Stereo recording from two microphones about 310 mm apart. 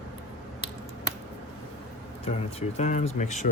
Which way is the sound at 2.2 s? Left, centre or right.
Centre.